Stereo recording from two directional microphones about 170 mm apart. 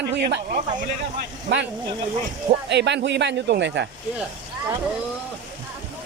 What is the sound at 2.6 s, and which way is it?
Speech, 90° right.